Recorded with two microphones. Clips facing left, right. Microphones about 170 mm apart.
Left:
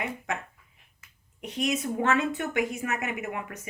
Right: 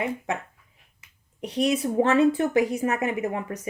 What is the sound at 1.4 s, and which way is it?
A woman's voice, 35° right (ahead or behind).